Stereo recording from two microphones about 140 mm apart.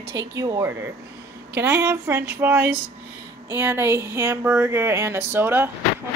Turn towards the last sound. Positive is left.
turn(degrees=-15)  # may be behind; listen again after turning